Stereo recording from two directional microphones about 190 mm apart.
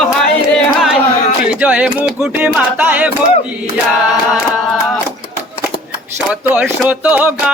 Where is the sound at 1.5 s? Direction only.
5° right (ahead or behind).